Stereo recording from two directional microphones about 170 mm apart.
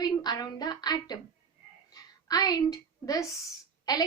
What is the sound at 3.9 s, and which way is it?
Speech, 20° left (ahead or behind).